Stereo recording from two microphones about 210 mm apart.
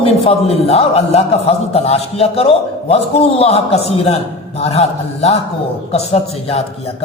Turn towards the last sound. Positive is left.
turn(degrees=30)  # may be behind; listen again after turning